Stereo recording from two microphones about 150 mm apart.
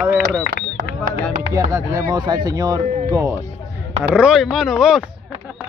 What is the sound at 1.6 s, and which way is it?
Speech, 20° right (ahead or behind).